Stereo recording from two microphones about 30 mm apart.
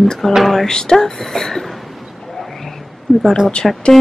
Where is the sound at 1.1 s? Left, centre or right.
Centre.